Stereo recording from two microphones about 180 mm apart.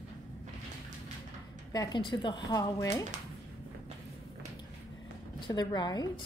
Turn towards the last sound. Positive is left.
turn(degrees=20)  # may be behind; listen again after turning